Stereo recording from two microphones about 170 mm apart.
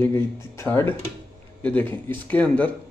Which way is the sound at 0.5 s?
10° left (ahead or behind).